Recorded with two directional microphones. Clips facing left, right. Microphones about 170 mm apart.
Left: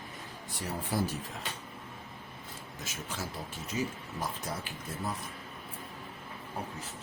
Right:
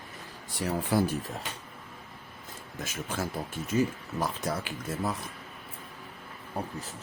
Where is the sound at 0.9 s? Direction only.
80° right.